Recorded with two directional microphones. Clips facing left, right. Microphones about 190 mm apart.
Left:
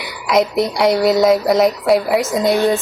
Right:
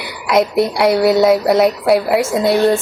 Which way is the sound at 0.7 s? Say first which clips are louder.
Right 1 dB; 5° right (ahead or behind).